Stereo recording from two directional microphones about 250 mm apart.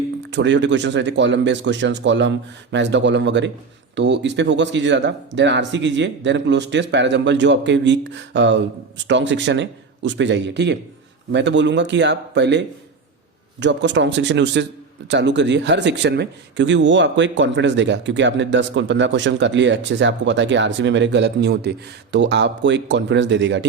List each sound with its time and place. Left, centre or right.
0.2 s speech: right